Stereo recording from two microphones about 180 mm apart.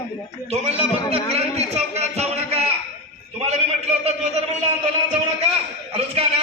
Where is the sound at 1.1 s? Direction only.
35° right (ahead or behind).